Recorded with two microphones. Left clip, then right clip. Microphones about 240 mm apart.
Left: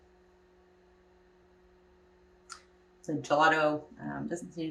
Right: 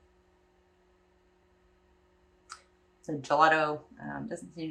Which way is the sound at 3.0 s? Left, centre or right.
Centre.